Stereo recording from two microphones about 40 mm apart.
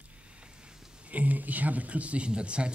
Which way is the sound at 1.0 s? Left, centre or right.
Right.